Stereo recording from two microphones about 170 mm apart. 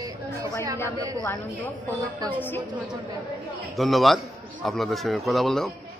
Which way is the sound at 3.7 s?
Centre (ahead or behind).